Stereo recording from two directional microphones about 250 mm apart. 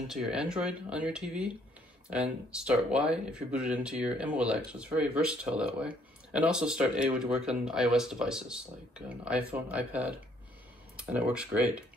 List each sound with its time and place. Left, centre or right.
0.1 s speech: centre